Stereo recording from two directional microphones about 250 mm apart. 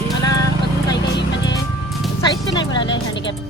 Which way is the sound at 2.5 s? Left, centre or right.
Centre.